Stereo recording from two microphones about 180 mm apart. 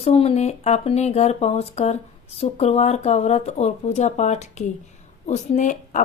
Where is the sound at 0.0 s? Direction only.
35° left (ahead or behind).